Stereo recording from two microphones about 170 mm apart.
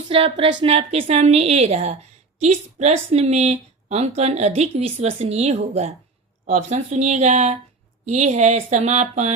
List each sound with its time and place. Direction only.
0.1 s speech: 30° right (ahead or behind)